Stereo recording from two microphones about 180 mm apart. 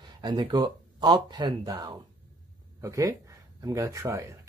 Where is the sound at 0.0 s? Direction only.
25° right (ahead or behind).